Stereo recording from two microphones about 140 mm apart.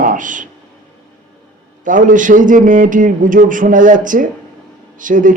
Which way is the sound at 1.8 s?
70° right (ahead or behind).